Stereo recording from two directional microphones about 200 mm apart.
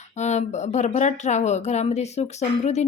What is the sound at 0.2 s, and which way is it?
Speech, 35° left (ahead or behind).